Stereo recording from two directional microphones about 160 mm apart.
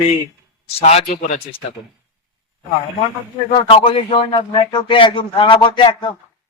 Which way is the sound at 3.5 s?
35° left (ahead or behind).